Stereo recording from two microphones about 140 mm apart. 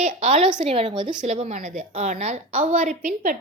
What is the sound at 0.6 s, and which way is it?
Speech, 45° right (ahead or behind).